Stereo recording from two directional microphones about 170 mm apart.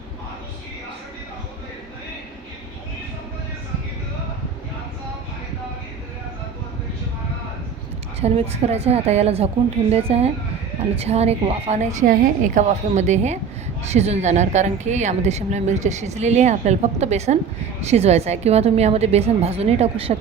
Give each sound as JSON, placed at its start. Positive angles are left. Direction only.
{"t": 8.2, "sound": "a woman's voice", "side_deg": -40}